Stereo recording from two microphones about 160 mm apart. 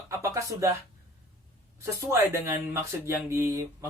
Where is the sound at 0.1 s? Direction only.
20° right (ahead or behind).